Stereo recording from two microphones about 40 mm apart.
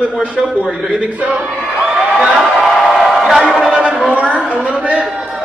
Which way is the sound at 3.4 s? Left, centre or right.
Centre.